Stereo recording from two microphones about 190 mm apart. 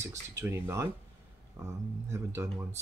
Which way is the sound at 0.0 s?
15° right (ahead or behind).